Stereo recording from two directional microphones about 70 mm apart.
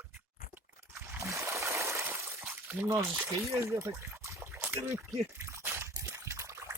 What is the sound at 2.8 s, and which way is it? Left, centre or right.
Speech, right.